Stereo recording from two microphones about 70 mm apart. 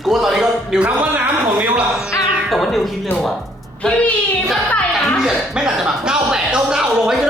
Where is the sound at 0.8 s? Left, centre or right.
Right.